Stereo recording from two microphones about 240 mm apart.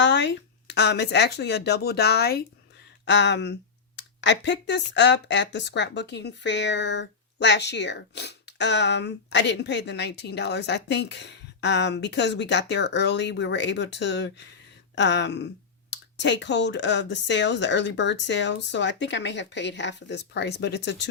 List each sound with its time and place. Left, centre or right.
0.0 s speech: left